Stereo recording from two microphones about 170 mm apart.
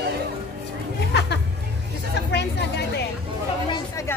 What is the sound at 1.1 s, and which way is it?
Music, 80° left.